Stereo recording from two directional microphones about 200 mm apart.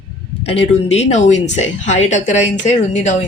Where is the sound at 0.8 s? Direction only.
35° left (ahead or behind).